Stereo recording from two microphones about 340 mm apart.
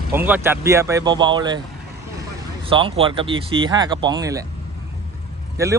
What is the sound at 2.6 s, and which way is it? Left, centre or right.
Speech, centre.